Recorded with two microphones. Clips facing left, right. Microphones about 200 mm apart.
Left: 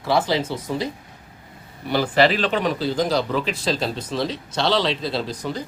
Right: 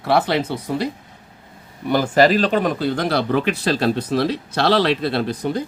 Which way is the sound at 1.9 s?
45° right (ahead or behind).